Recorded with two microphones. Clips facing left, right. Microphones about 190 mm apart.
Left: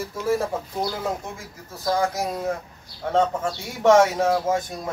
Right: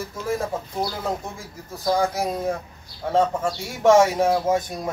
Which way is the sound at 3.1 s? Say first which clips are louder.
Right 1 dB; 10° right (ahead or behind).